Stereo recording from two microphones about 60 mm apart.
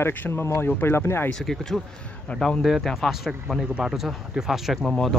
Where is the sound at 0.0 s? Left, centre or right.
Left.